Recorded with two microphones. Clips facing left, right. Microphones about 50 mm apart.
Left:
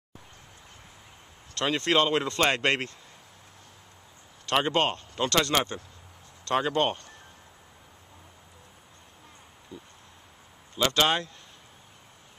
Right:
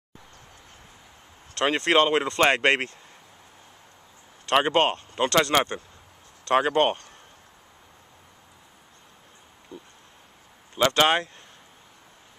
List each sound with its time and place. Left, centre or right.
1.5 s a sound: right
1.9 s speech: right
4.5 s speech: right
6.5 s speech: right
10.8 s speech: right